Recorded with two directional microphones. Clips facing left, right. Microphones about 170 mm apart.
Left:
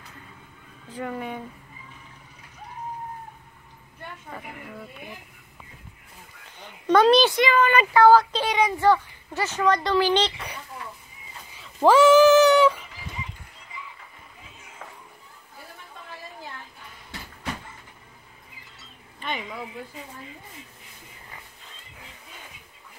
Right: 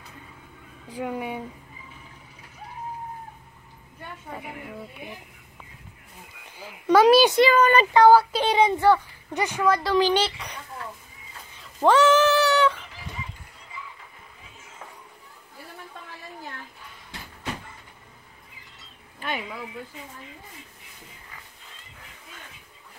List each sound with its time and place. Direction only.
0.8 s a woman's voice: 10° right (ahead or behind)
4.3 s a woman's voice: 10° right (ahead or behind)
6.6 s a child's voice: 5° right (ahead or behind)
7.3 s speech: 40° right (ahead or behind)
7.9 s a woman's voice: 15° right (ahead or behind)
8.5 s speech: 30° right (ahead or behind)
8.7 s a woman's voice: 15° right (ahead or behind); by 10.6 s centre (ahead or behind)
11.5 s a sound: 5° left (ahead or behind)
19.1 s a sound: 5° right (ahead or behind)